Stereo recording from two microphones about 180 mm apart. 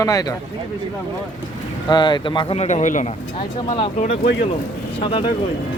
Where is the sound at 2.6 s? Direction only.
40° left (ahead or behind).